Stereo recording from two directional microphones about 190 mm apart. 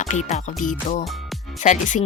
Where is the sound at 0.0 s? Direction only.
35° left (ahead or behind).